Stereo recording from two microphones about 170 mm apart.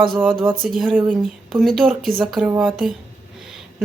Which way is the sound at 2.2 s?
10° right (ahead or behind).